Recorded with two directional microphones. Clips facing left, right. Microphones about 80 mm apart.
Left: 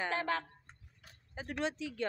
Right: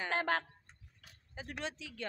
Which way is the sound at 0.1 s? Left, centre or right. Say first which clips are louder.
Right 1 dB; right.